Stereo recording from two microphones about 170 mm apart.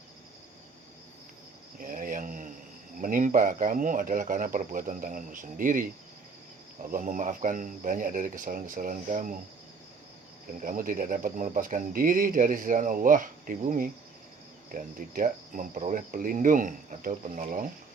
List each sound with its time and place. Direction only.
1.8 s a sound: 55° right (ahead or behind)
3.0 s speech: 50° right (ahead or behind)
6.9 s speech: 50° right (ahead or behind)
10.6 s speech: 55° right (ahead or behind)